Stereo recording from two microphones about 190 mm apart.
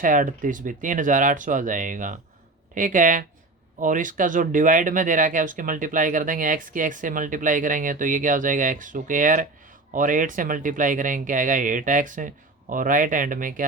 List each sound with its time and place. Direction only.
0.0 s speech: 45° right (ahead or behind)